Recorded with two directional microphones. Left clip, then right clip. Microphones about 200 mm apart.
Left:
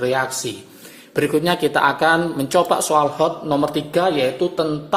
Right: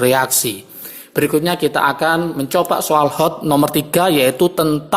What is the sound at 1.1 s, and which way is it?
Speech, 20° right (ahead or behind).